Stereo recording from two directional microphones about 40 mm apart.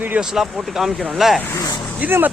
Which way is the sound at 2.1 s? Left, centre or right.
Right.